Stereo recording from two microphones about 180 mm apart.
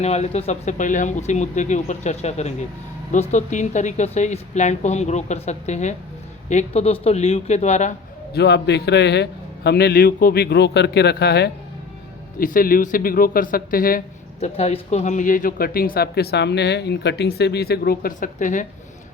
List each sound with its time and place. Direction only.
0.0 s a woman's voice: 35° left (ahead or behind)
8.3 s speech: 65° left (ahead or behind)
12.4 s speech: 50° left (ahead or behind)
14.4 s speech: 35° left (ahead or behind)